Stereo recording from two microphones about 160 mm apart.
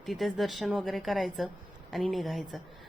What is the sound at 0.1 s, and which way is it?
A woman's voice, centre (ahead or behind).